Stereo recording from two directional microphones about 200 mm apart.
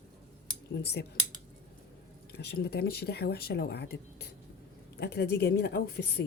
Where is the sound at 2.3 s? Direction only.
55° left (ahead or behind).